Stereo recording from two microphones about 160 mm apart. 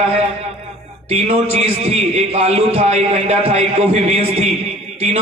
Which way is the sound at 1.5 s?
40° right (ahead or behind).